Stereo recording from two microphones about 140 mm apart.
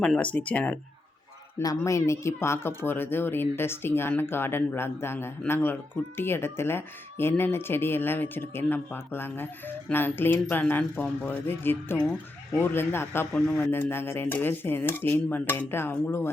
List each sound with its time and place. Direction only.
0.0 s speech: 10° left (ahead or behind)
1.5 s speech: 20° left (ahead or behind)